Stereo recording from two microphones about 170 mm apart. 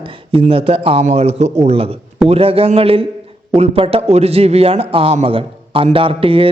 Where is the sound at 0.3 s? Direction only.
35° right (ahead or behind).